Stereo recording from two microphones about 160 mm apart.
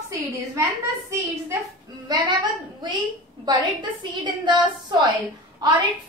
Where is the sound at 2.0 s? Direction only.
25° right (ahead or behind).